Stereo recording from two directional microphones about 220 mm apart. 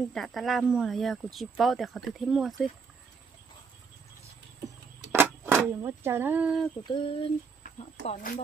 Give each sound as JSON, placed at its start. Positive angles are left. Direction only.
{"t": 0.1, "sound": "speech", "side_deg": 0}
{"t": 5.1, "sound": "speech", "side_deg": -10}
{"t": 6.8, "sound": "speech", "side_deg": 20}